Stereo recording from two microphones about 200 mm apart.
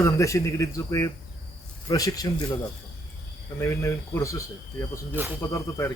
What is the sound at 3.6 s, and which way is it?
Speech, 15° left (ahead or behind).